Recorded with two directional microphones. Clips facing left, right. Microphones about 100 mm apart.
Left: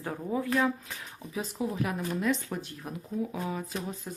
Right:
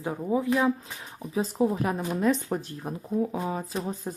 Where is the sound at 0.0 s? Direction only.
15° right (ahead or behind).